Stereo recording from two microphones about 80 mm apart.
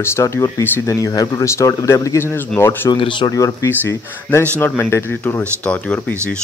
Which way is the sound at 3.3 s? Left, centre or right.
Left.